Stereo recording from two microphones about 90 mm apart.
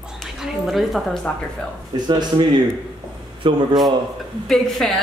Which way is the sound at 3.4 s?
70° right (ahead or behind).